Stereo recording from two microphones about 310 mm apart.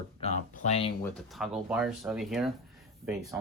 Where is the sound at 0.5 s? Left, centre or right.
Left.